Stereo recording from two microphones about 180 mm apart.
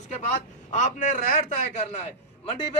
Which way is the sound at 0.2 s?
40° left (ahead or behind).